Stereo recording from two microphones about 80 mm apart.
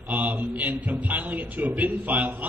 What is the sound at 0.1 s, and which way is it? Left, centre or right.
A man's voice, right.